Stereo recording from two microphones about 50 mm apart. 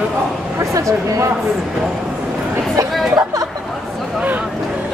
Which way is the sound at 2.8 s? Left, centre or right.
Right.